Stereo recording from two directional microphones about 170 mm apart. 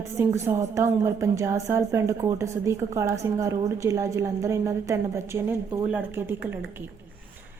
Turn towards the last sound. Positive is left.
turn(degrees=-10)  # may be behind; listen again after turning